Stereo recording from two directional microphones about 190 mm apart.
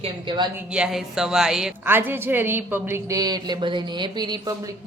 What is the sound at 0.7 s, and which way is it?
A woman's voice, 5° right (ahead or behind).